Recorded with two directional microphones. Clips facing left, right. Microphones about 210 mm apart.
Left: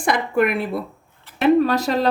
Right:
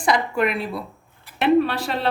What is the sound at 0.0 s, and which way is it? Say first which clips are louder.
Speech: left 2 dB; 55° left (ahead or behind).